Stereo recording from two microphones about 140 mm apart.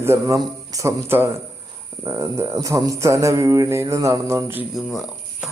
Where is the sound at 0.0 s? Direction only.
20° right (ahead or behind).